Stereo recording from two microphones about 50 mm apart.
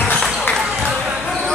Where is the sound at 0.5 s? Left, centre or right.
Centre.